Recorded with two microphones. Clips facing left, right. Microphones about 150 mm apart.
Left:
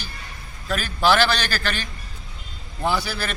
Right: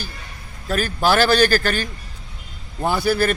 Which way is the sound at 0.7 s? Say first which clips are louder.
Right 1 dB; 45° right (ahead or behind).